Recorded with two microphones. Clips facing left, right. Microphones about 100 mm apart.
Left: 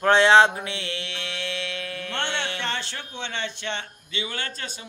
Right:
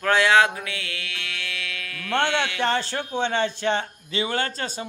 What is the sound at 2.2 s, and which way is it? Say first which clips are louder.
Music: right 5 dB; 30° left (ahead or behind).